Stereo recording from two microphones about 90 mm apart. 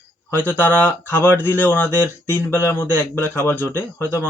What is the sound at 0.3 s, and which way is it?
Speech, 20° left (ahead or behind).